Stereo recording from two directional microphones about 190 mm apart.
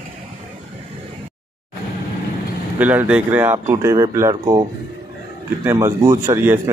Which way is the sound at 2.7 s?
10° right (ahead or behind).